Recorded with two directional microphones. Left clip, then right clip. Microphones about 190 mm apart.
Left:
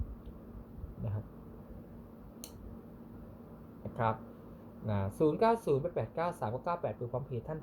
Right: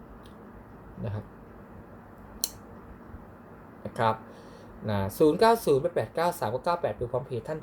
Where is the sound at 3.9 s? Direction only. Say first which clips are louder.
Right 7 dB; 15° right (ahead or behind).